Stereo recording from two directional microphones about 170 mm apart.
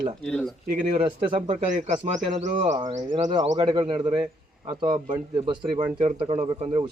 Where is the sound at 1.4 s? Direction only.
45° right (ahead or behind).